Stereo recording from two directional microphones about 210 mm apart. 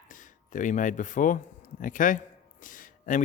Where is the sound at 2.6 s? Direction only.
40° left (ahead or behind).